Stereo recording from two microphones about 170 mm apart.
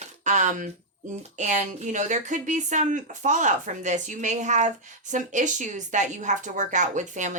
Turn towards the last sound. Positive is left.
turn(degrees=-45)  # may be behind; listen again after turning